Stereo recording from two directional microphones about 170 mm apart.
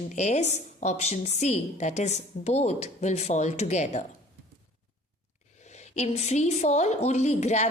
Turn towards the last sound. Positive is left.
turn(degrees=40)  # may be behind; listen again after turning